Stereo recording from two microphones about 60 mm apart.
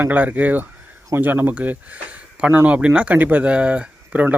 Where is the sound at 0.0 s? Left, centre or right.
Right.